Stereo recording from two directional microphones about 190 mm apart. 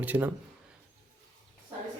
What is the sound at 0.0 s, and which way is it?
Speech, 10° right (ahead or behind).